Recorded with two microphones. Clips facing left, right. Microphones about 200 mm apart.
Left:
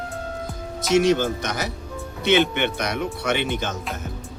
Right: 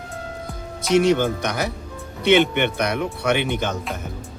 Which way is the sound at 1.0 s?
60° right (ahead or behind).